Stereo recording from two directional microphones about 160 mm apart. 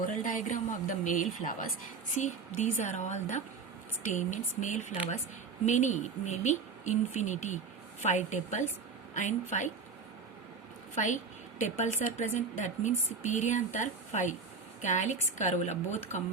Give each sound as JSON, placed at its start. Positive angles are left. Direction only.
{"t": 0.0, "sound": "speech", "side_deg": 55}
{"t": 10.9, "sound": "speech", "side_deg": 50}